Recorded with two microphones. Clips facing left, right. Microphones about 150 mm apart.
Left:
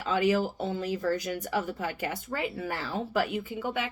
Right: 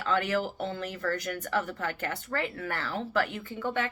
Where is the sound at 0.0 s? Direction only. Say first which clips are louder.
Left 3 dB; 15° left (ahead or behind).